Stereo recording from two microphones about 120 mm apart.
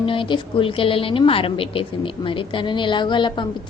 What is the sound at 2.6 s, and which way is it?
Speech, 40° left (ahead or behind).